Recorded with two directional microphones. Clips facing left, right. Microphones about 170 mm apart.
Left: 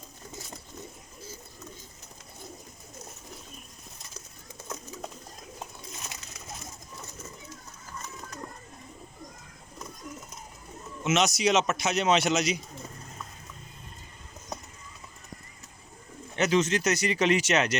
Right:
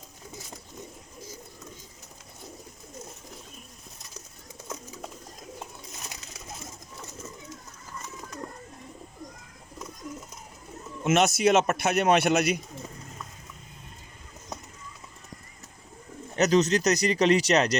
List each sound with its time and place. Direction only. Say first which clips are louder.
11.0 s a man's voice: right 3 dB; 55° right (ahead or behind)
16.3 s speech: right 3 dB; 40° right (ahead or behind)